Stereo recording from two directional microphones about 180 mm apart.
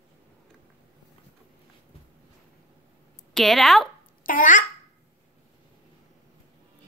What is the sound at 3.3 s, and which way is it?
Speech, centre (ahead or behind).